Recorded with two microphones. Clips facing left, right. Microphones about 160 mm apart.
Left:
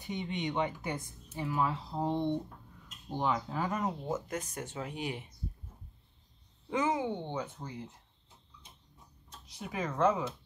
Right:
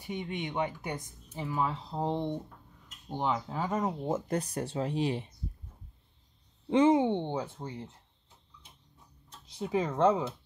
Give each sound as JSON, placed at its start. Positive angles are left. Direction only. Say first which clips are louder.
{"t": 0.0, "sound": "speech", "louder": "even", "side_deg": -10}
{"t": 4.3, "sound": "speech", "louder": "right 6 dB", "side_deg": -35}
{"t": 6.7, "sound": "speech", "louder": "right 8 dB", "side_deg": -30}
{"t": 9.5, "sound": "speech", "louder": "right 6 dB", "side_deg": -25}